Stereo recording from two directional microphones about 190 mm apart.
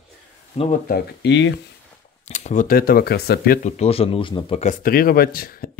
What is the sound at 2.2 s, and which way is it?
Speech, 40° left (ahead or behind).